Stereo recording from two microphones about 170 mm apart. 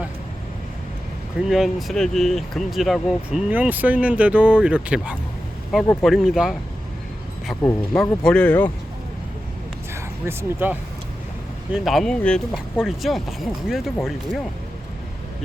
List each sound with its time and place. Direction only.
1.4 s speech: centre (ahead or behind)
7.9 s speech: 5° left (ahead or behind)
9.9 s speech: 10° right (ahead or behind)
11.7 s speech: centre (ahead or behind)